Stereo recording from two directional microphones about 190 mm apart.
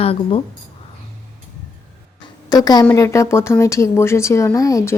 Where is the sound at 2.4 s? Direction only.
20° left (ahead or behind).